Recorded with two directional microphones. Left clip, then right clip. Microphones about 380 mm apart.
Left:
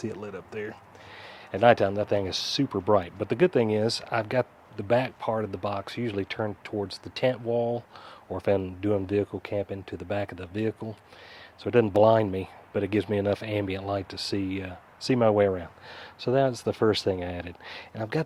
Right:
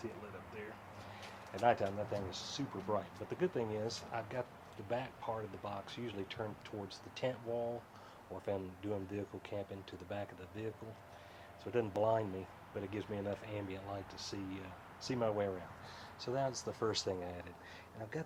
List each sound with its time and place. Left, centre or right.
1.6 s speech: left